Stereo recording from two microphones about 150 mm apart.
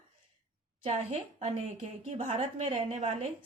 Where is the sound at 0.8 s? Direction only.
40° right (ahead or behind).